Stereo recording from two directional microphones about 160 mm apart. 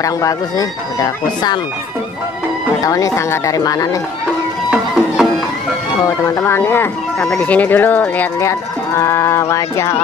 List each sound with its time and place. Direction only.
0.0 s speech: 20° left (ahead or behind)
2.8 s speech: 20° left (ahead or behind)
4.6 s music: 5° right (ahead or behind)
6.2 s speech: 15° left (ahead or behind)